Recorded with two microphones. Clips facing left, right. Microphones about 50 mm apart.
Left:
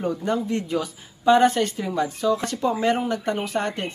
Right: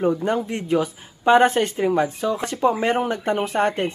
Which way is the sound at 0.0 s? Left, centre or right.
Right.